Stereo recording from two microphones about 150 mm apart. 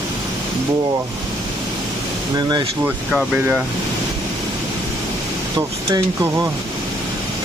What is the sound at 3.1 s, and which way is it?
Speech, 10° right (ahead or behind).